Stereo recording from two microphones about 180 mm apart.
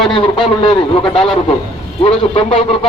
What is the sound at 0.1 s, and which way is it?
Speech, 30° left (ahead or behind).